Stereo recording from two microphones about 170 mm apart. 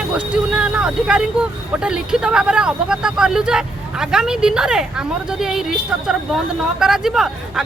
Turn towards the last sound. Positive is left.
turn(degrees=0)  # may be behind; listen again after turning